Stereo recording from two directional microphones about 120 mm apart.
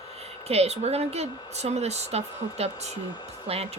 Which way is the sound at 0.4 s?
60° right (ahead or behind).